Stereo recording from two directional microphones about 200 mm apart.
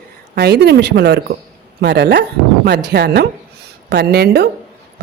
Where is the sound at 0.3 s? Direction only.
55° right (ahead or behind).